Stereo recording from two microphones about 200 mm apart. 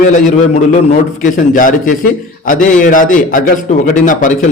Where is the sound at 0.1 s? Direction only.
35° left (ahead or behind).